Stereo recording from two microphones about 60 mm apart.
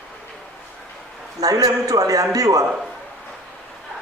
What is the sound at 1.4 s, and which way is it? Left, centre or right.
A man's voice, right.